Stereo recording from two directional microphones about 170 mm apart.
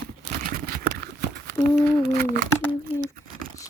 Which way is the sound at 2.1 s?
55° right (ahead or behind).